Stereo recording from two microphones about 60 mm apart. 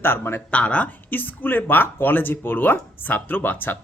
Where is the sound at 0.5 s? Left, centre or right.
Left.